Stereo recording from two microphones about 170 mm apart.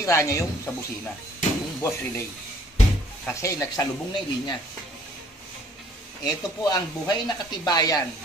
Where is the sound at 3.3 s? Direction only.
15° left (ahead or behind).